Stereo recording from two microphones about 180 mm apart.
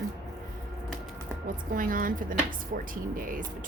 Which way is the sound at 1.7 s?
50° right (ahead or behind).